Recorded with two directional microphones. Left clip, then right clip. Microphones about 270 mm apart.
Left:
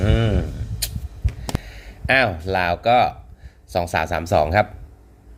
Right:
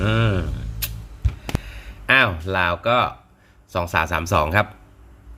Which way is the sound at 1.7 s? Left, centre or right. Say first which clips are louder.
Right 1 dB; right.